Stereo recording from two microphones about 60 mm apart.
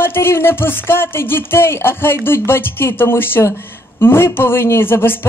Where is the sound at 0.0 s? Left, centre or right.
Left.